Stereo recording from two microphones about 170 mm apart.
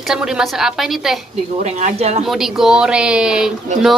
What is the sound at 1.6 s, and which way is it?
Speech, 45° right (ahead or behind).